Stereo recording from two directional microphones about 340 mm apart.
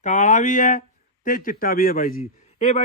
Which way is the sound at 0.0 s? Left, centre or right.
Left.